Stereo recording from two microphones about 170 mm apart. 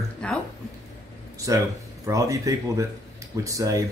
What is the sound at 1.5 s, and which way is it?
Speech, 20° right (ahead or behind).